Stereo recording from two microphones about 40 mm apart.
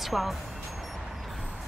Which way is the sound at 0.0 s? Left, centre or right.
Centre.